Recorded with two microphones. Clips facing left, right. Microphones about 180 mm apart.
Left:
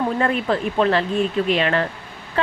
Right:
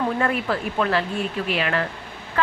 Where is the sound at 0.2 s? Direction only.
30° left (ahead or behind).